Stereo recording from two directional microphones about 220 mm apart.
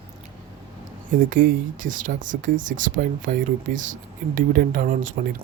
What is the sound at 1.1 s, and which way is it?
Speech, 40° right (ahead or behind).